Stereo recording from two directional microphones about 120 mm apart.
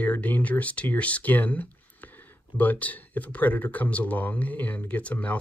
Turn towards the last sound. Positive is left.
turn(degrees=10)  # may be behind; listen again after turning